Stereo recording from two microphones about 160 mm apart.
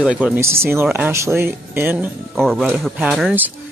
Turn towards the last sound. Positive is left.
turn(degrees=-5)  # may be behind; listen again after turning